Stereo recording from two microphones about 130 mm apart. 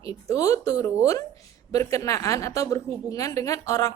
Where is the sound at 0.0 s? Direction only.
25° left (ahead or behind).